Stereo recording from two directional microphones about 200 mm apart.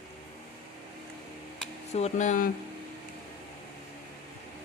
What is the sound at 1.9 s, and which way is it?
Speech, 35° left (ahead or behind).